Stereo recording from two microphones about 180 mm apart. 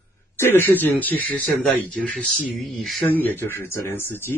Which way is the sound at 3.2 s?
10° left (ahead or behind).